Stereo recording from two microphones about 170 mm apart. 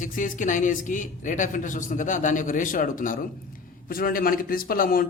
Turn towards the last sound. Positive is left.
turn(degrees=55)  # may be behind; listen again after turning